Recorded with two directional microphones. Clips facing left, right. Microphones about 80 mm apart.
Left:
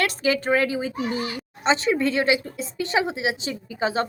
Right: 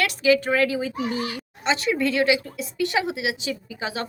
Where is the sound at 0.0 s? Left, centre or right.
Left.